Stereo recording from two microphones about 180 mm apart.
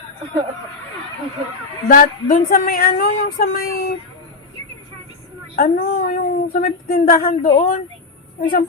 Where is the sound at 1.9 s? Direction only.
55° left (ahead or behind).